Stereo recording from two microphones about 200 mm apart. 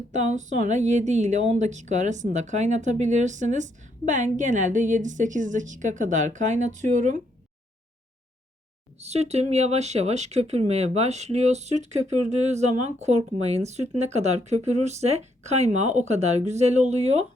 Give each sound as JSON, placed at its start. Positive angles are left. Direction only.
{"t": 0.1, "sound": "speech", "side_deg": -35}
{"t": 9.0, "sound": "speech", "side_deg": -30}